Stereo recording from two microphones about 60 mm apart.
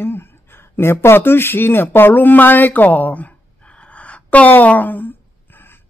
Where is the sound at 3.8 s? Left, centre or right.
Left.